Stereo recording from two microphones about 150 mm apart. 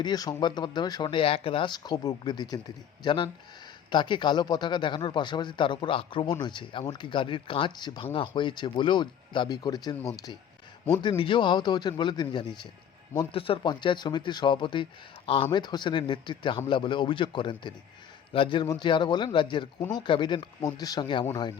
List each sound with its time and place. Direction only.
0.0 s speech: 25° left (ahead or behind)